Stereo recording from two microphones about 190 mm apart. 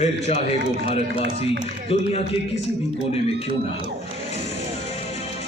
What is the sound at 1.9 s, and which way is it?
Speech, 35° left (ahead or behind).